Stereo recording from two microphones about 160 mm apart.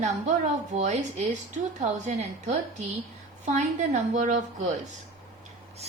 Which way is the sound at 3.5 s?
50° right (ahead or behind).